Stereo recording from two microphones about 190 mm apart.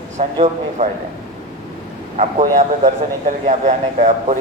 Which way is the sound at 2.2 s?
35° right (ahead or behind).